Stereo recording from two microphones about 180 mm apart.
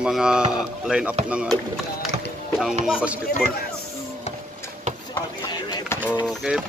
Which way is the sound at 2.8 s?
5° right (ahead or behind).